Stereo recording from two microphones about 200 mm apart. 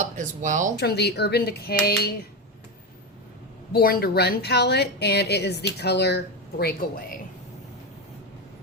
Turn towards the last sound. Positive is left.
turn(degrees=45)  # may be behind; listen again after turning